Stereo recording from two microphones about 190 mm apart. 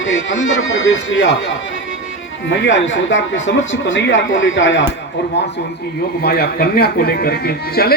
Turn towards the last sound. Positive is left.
turn(degrees=55)  # may be behind; listen again after turning